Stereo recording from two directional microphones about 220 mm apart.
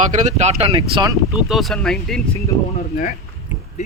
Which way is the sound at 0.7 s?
20° right (ahead or behind).